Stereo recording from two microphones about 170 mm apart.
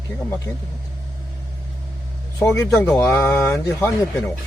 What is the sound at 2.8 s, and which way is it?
Speech, 10° left (ahead or behind).